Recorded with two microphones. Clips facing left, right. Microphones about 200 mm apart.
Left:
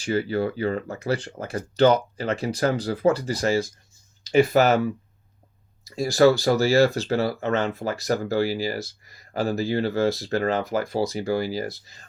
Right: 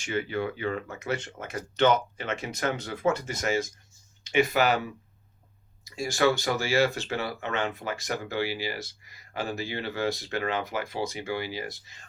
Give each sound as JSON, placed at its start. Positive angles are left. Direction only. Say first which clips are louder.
{"t": 0.0, "sound": "speech", "louder": "left 6 dB", "side_deg": 35}
{"t": 5.8, "sound": "speech", "louder": "left 7 dB", "side_deg": 35}